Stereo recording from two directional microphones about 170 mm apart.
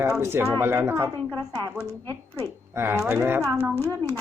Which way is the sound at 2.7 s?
15° right (ahead or behind).